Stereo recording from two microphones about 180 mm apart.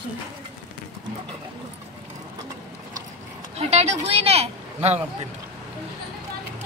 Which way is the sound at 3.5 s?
35° right (ahead or behind).